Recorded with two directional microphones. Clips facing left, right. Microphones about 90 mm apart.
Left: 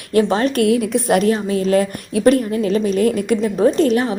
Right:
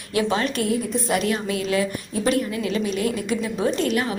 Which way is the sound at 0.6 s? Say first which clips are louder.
Left 8 dB; 85° left.